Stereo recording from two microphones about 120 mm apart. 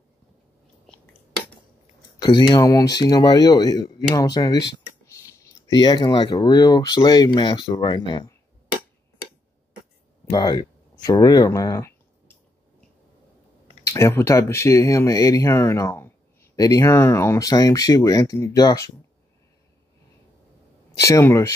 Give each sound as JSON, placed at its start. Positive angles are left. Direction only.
{"t": 2.1, "sound": "speech", "side_deg": 30}
{"t": 10.3, "sound": "speech", "side_deg": 35}
{"t": 13.8, "sound": "speech", "side_deg": 25}
{"t": 21.0, "sound": "speech", "side_deg": 25}